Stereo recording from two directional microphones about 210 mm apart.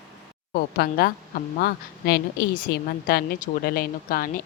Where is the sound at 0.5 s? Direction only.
50° left (ahead or behind).